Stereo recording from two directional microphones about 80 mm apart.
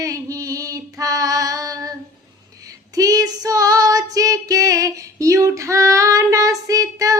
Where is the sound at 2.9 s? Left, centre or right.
Right.